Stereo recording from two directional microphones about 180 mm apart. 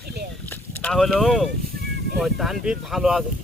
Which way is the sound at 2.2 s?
Centre (ahead or behind).